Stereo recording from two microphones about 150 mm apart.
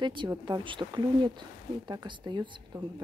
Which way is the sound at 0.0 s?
30° right (ahead or behind).